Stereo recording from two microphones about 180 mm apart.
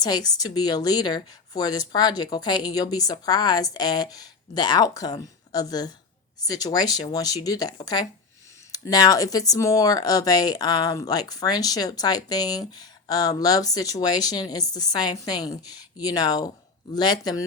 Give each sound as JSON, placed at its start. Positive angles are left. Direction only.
{"t": 0.0, "sound": "speech", "side_deg": 20}